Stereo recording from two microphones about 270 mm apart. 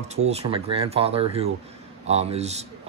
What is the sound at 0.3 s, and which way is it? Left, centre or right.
Speech, right.